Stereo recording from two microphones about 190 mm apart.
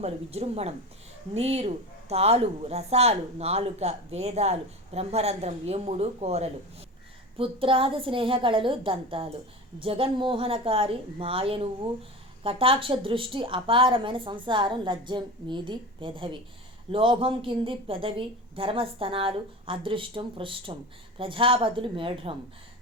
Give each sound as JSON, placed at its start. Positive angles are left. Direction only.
{"t": 0.0, "sound": "a woman's voice", "side_deg": -35}